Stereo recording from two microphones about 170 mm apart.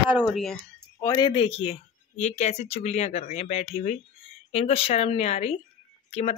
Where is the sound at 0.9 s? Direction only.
25° left (ahead or behind).